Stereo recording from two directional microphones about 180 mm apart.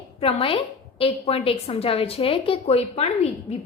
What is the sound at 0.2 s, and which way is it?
A woman's voice, 30° left (ahead or behind).